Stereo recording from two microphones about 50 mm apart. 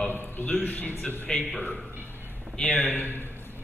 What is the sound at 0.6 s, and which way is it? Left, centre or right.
Speech, left.